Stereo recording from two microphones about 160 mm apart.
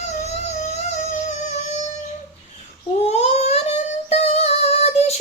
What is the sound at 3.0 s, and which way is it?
Singing, 40° left (ahead or behind).